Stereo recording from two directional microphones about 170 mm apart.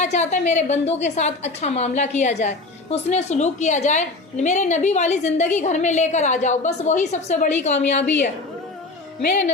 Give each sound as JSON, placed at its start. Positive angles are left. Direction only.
{"t": 0.0, "sound": "a woman's voice", "side_deg": 40}